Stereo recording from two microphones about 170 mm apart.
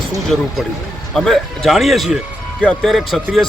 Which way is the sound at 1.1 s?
Centre (ahead or behind).